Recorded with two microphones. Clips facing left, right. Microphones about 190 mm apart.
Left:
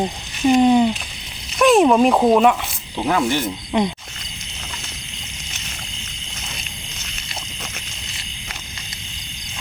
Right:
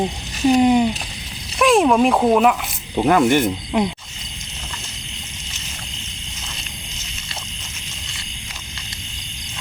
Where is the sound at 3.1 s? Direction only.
55° right (ahead or behind).